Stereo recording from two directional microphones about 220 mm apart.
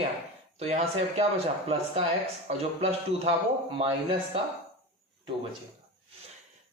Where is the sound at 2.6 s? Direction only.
30° right (ahead or behind).